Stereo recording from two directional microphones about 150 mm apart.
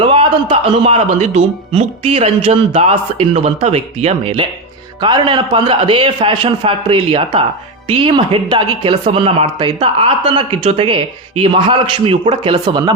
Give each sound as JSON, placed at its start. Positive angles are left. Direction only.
{"t": 0.0, "sound": "speech", "side_deg": -35}
{"t": 4.9, "sound": "speech", "side_deg": -30}